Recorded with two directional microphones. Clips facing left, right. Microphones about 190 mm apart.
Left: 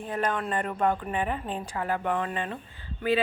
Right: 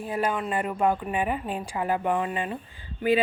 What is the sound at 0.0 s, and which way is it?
A woman's voice, 5° right (ahead or behind).